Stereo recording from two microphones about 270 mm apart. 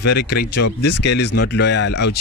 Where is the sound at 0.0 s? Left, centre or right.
Left.